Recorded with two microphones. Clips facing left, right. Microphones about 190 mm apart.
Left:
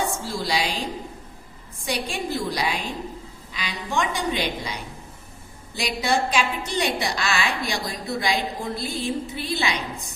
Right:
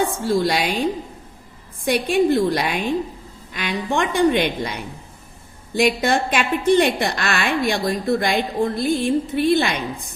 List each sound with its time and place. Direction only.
0.0 s a woman's voice: 60° right (ahead or behind)